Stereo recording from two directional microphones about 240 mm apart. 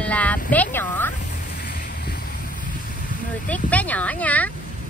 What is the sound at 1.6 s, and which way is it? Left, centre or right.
Boat, left.